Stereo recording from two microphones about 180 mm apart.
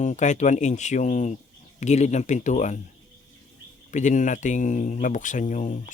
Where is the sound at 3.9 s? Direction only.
45° left (ahead or behind).